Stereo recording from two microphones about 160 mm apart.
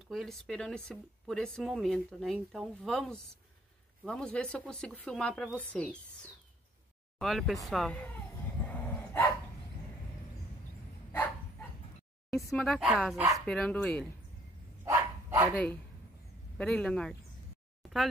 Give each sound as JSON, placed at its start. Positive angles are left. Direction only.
{"t": 0.1, "sound": "speech", "side_deg": 0}
{"t": 7.2, "sound": "speech", "side_deg": 0}
{"t": 8.6, "sound": "dog", "side_deg": 10}
{"t": 12.5, "sound": "speech", "side_deg": 0}
{"t": 14.9, "sound": "dog", "side_deg": -20}
{"t": 15.5, "sound": "a woman's voice", "side_deg": 10}
{"t": 17.8, "sound": "a sound", "side_deg": 0}